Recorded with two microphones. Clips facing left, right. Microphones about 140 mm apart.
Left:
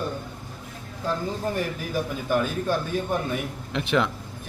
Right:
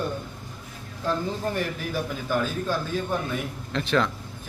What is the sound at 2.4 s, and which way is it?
A man's voice, 15° left (ahead or behind).